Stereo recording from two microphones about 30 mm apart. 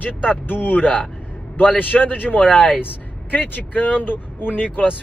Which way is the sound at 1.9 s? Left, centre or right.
Centre.